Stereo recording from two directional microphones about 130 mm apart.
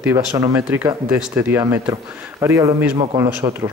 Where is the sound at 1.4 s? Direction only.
25° right (ahead or behind).